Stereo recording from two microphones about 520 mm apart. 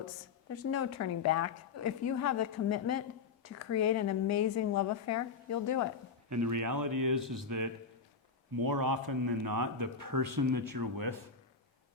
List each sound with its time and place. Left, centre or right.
0.0 s a woman's voice: left
6.3 s speech: right
7.2 s a man's voice: centre
7.4 s speech: right